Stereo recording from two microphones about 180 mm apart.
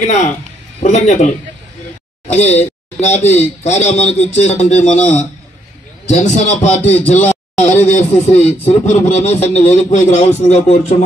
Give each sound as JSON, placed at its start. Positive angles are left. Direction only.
{"t": 0.0, "sound": "speech", "side_deg": 40}
{"t": 2.3, "sound": "speech", "side_deg": 35}
{"t": 7.2, "sound": "a sound", "side_deg": 10}
{"t": 7.6, "sound": "speech", "side_deg": 40}